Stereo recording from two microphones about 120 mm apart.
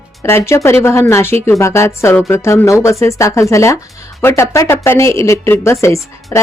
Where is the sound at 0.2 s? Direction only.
20° left (ahead or behind).